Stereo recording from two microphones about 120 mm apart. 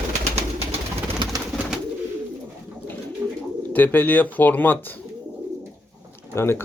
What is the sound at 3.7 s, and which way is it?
Speech, 15° left (ahead or behind).